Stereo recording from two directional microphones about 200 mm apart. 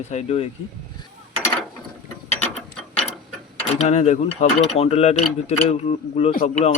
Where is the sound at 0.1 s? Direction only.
30° left (ahead or behind).